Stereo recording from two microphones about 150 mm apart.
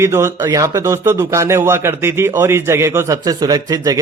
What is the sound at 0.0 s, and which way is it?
A man's voice, 20° right (ahead or behind).